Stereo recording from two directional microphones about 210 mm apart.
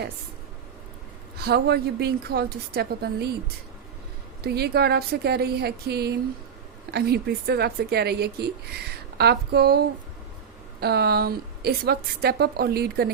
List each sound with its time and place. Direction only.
1.4 s speech: 50° right (ahead or behind)
4.4 s speech: 50° right (ahead or behind)